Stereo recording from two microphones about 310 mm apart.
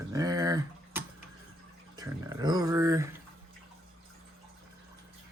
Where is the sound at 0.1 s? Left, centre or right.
Centre.